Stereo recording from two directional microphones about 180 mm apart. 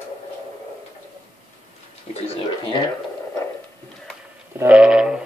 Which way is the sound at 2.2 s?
30° left (ahead or behind).